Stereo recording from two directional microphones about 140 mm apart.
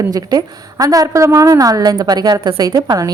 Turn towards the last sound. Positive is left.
turn(degrees=-25)  # may be behind; listen again after turning